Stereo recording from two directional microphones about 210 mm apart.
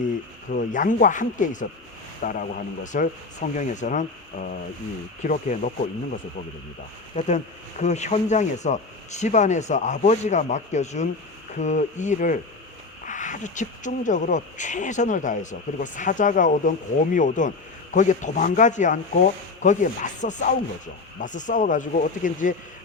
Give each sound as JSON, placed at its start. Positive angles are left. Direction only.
{"t": 0.5, "sound": "speech", "side_deg": 40}
{"t": 5.2, "sound": "speech", "side_deg": 35}
{"t": 7.2, "sound": "speech", "side_deg": 35}